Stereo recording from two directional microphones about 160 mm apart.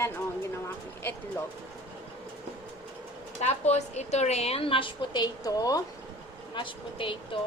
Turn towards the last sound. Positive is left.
turn(degrees=30)  # may be behind; listen again after turning